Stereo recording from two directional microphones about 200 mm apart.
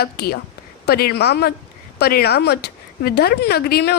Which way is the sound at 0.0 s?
50° left (ahead or behind).